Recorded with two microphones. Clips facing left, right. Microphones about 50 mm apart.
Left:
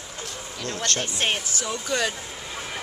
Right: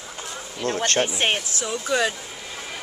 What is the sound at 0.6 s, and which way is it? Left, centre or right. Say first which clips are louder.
Speech: right 6 dB; right.